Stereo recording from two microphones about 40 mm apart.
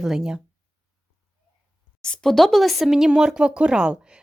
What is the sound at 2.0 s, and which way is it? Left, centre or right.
Speech, left.